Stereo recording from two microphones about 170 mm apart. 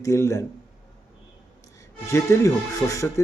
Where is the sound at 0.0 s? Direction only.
15° left (ahead or behind).